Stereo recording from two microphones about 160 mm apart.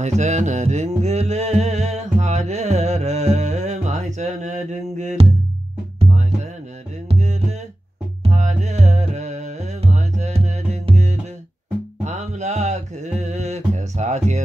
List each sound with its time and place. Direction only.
0.0 s music: 45° right (ahead or behind)
7.1 s music: 45° right (ahead or behind)
12.0 s mantra: 45° right (ahead or behind)